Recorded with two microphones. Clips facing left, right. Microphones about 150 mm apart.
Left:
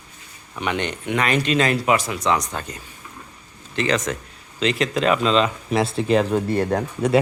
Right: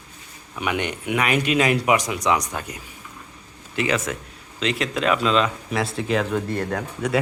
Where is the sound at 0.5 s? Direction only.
10° right (ahead or behind).